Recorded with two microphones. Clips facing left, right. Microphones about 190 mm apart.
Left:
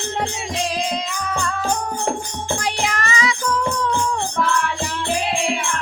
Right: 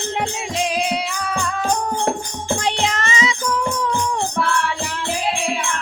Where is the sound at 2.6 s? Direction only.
25° right (ahead or behind).